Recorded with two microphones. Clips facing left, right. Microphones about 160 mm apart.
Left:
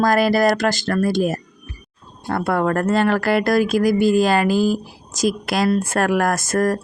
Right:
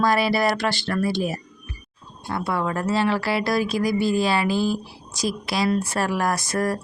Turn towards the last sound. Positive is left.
turn(degrees=45)  # may be behind; listen again after turning